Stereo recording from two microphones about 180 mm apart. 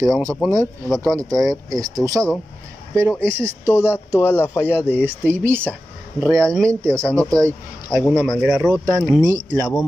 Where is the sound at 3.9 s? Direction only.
15° left (ahead or behind).